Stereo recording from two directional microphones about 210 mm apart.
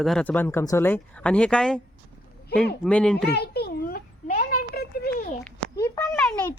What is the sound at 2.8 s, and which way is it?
Speech, 5° left (ahead or behind).